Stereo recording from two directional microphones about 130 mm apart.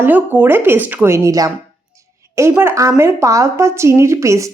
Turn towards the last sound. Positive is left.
turn(degrees=-25)  # may be behind; listen again after turning